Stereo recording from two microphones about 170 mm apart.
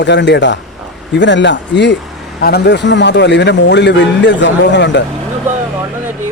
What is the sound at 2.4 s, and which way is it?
Speech, 65° left (ahead or behind).